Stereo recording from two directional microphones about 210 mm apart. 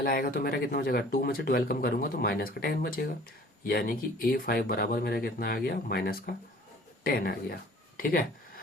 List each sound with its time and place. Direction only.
0.0 s speech: 45° left (ahead or behind)